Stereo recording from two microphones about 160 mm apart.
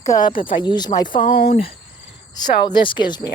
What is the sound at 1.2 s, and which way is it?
Speech, 70° left (ahead or behind).